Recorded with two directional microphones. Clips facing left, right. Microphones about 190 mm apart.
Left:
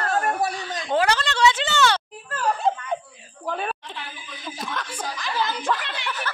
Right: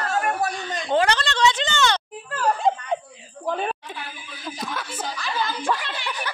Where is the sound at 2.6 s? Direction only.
15° right (ahead or behind).